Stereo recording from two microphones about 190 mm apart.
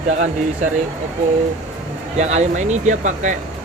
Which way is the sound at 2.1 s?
35° right (ahead or behind).